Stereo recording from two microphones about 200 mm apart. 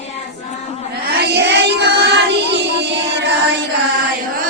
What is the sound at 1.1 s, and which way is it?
Child singing, 60° right (ahead or behind).